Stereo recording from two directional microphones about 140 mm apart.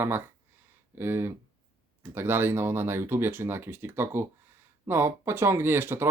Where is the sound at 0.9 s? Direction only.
15° right (ahead or behind).